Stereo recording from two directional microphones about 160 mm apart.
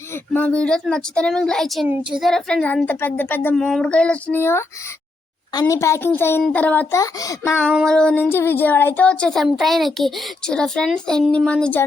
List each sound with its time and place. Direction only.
0.1 s a woman's voice: 10° left (ahead or behind)
7.0 s speech: 20° left (ahead or behind)
7.9 s speech: 5° left (ahead or behind)